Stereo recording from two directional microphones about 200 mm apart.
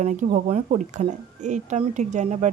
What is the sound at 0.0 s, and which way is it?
Speech, 35° right (ahead or behind).